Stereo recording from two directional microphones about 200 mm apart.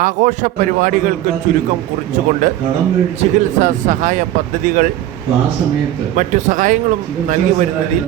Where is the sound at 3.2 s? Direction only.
40° right (ahead or behind).